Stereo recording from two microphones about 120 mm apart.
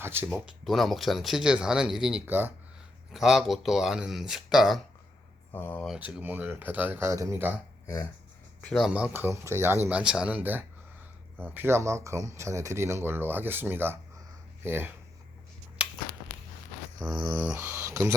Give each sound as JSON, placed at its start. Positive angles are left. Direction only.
{"t": 0.0, "sound": "speech", "side_deg": -20}
{"t": 0.3, "sound": "speech", "side_deg": 0}
{"t": 2.2, "sound": "speech", "side_deg": -15}
{"t": 3.1, "sound": "speech", "side_deg": 0}
{"t": 5.5, "sound": "speech", "side_deg": 20}
{"t": 6.0, "sound": "speech", "side_deg": -15}
{"t": 7.1, "sound": "speech", "side_deg": -25}
{"t": 8.6, "sound": "speech", "side_deg": 0}
{"t": 10.0, "sound": "speech", "side_deg": -5}
{"t": 15.8, "sound": "a sound", "side_deg": -10}
{"t": 17.1, "sound": "dog", "side_deg": -35}
{"t": 17.3, "sound": "speech", "side_deg": -10}